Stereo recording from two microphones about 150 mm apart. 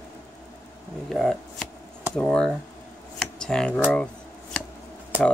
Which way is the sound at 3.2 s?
5° left (ahead or behind).